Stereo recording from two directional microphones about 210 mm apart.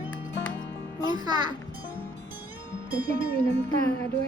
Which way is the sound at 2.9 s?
45° right (ahead or behind).